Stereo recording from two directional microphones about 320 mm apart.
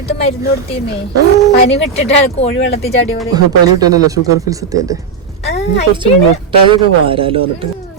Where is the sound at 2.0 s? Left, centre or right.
Centre.